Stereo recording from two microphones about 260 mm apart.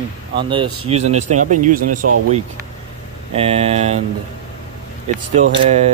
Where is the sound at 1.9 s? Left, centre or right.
Right.